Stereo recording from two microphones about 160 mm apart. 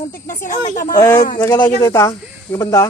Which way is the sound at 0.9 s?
20° left (ahead or behind).